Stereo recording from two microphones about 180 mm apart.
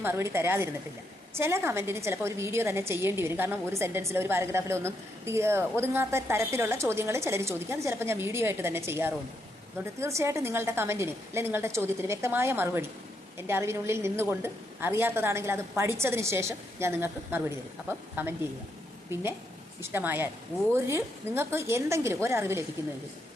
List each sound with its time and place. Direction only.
0.0 s a woman's voice: 15° right (ahead or behind)